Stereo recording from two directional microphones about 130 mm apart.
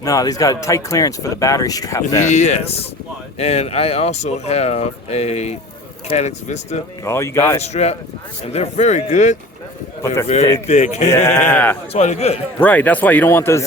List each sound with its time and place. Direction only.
0.0 s speech: 25° left (ahead or behind)
2.2 s speech: 60° left (ahead or behind)
7.0 s speech: 20° left (ahead or behind)
7.6 s speech: 55° left (ahead or behind)
11.5 s speech: 15° left (ahead or behind)
11.9 s speech: 60° left (ahead or behind)
12.5 s speech: 15° left (ahead or behind)